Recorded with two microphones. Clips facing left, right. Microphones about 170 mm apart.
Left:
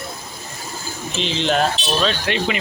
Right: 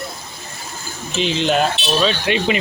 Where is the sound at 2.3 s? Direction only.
20° right (ahead or behind).